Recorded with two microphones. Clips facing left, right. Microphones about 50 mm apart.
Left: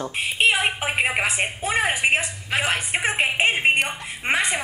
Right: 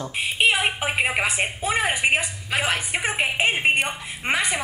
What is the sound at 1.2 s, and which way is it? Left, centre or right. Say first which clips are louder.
A woman's voice: even; left.